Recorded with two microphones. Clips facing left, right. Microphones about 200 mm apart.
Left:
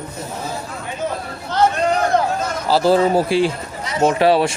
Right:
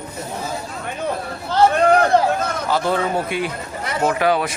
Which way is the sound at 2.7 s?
35° left (ahead or behind).